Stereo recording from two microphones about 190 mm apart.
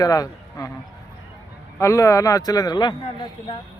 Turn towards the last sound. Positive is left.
turn(degrees=25)  # may be behind; listen again after turning